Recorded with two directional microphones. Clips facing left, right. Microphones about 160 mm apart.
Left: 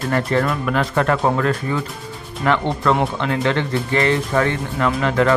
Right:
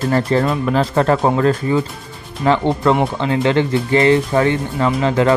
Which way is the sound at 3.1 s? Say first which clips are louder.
Right 4 dB; 30° right (ahead or behind).